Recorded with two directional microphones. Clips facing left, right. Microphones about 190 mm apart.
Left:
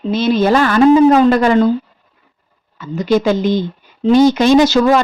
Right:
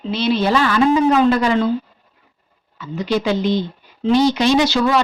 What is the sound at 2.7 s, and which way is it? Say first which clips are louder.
A woman's voice: left 6 dB; 45° left (ahead or behind).